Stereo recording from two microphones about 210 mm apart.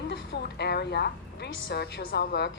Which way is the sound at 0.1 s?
55° left (ahead or behind).